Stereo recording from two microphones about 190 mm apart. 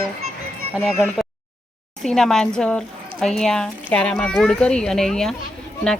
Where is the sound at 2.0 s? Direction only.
5° left (ahead or behind).